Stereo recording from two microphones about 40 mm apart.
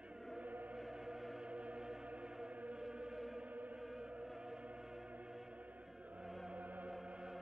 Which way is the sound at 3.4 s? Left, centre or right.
Right.